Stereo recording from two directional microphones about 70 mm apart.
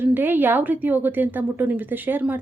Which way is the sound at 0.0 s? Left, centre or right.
Right.